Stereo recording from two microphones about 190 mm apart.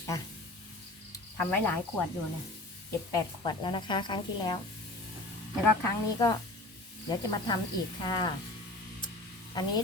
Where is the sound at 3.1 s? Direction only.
25° left (ahead or behind).